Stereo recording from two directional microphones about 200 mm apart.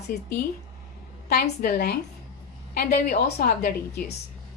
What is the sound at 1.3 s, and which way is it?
A woman's voice, 50° left (ahead or behind).